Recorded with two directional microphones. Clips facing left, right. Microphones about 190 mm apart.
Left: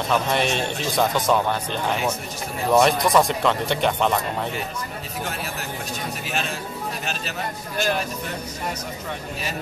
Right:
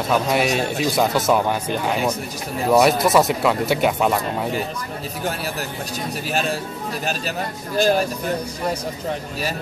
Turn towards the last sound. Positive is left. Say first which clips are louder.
# right 6 dB
turn(degrees=-35)  # may be behind; listen again after turning